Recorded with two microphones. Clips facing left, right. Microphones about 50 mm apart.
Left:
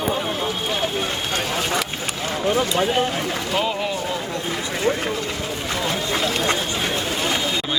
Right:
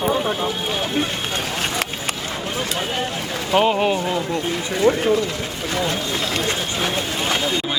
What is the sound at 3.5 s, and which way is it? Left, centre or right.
Speech, right.